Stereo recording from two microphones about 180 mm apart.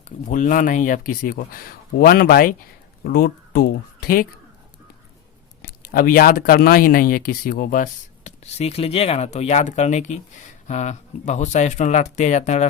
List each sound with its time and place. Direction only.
0.0 s speech: 45° left (ahead or behind)
5.6 s speech: 55° left (ahead or behind)